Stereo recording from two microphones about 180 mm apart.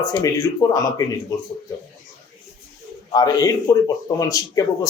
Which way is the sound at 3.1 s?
20° left (ahead or behind).